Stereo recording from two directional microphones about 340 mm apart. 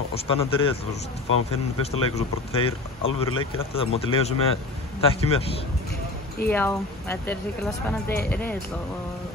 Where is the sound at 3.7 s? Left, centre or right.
Centre.